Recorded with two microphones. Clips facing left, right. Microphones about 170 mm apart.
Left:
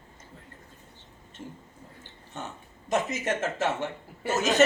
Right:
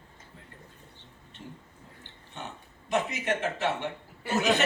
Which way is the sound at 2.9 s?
45° left (ahead or behind).